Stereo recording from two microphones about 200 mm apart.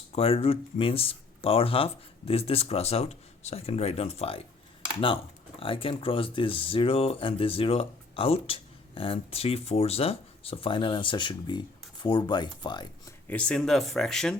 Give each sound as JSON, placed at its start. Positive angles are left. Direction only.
{"t": 0.1, "sound": "speech", "side_deg": 30}
{"t": 13.2, "sound": "speech", "side_deg": 5}